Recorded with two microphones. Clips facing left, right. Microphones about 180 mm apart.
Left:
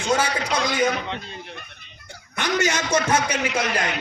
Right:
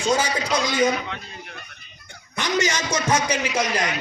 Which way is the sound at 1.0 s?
30° left (ahead or behind).